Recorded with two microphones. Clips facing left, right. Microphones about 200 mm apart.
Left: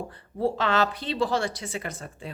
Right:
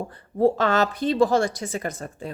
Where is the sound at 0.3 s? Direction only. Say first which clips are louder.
Right 5 dB; 45° right (ahead or behind).